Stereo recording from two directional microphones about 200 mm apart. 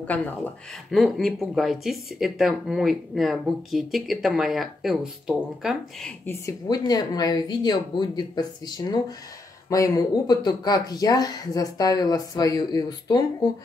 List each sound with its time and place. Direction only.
0.9 s speech: centre (ahead or behind)
6.2 s speech: 15° left (ahead or behind)